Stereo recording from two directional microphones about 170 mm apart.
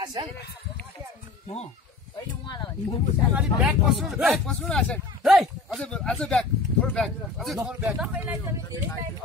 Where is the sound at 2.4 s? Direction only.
25° left (ahead or behind).